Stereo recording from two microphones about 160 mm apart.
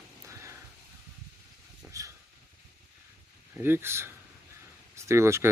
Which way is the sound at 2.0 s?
20° right (ahead or behind).